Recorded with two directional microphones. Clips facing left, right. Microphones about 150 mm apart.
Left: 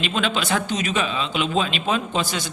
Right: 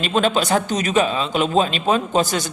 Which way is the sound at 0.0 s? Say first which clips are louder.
Right 5 dB; 40° right (ahead or behind).